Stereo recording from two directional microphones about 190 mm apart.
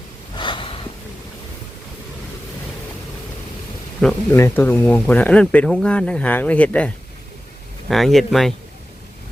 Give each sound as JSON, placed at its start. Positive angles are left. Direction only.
{"t": 0.3, "sound": "gasp", "side_deg": 25}
{"t": 4.0, "sound": "speech", "side_deg": 10}